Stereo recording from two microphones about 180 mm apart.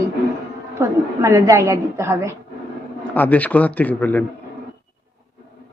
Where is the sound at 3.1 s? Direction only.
10° left (ahead or behind).